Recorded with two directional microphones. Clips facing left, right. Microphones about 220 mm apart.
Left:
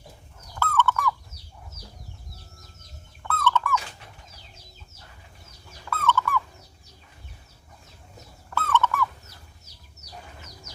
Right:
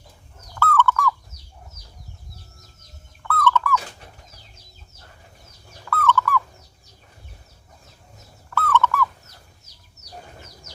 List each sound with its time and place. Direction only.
0.6 s fowl: 20° left (ahead or behind)
3.2 s bird: 25° left (ahead or behind)
5.9 s owl: 25° left (ahead or behind)
8.4 s owl: 25° left (ahead or behind)